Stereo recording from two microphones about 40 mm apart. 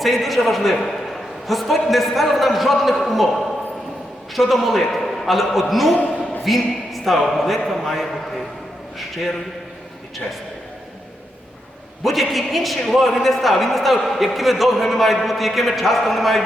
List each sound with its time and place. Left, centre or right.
0.0 s a man's voice: centre
6.0 s a sound: left
6.4 s a man's voice: centre
12.0 s a man's voice: centre